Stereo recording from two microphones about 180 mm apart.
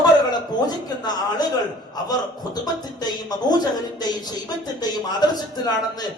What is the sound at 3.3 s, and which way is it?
Speech, 20° left (ahead or behind).